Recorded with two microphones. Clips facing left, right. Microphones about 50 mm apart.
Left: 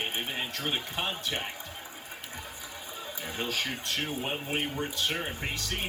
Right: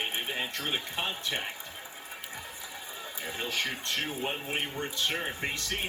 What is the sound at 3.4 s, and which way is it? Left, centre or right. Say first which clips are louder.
Speech: left 1 dB; centre.